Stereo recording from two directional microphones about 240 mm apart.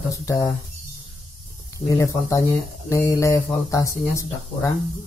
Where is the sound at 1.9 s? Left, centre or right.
Centre.